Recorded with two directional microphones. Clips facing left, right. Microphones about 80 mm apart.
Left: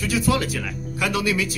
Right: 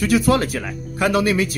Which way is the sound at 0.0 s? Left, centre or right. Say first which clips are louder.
Right 5 dB; right.